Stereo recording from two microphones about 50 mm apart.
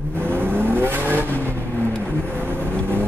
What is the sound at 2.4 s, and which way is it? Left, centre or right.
Vehicle, right.